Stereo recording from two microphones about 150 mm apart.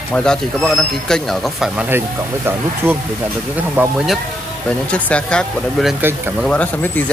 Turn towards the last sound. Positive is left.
turn(degrees=10)  # may be behind; listen again after turning